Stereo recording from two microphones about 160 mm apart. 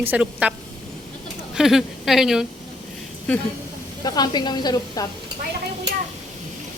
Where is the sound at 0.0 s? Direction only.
10° right (ahead or behind).